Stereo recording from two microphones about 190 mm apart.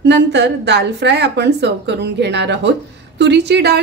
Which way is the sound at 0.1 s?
65° right (ahead or behind).